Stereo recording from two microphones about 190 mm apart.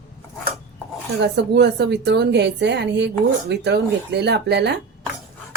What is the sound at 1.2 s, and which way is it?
A woman's voice, 60° right (ahead or behind).